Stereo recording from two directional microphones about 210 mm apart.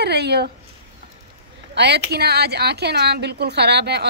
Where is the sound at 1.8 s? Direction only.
50° right (ahead or behind).